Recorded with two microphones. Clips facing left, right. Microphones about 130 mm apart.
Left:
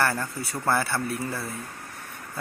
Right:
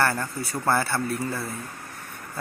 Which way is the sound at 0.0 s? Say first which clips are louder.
Right 1 dB; centre (ahead or behind).